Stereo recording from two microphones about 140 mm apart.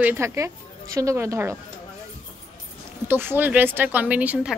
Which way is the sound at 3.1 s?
15° right (ahead or behind).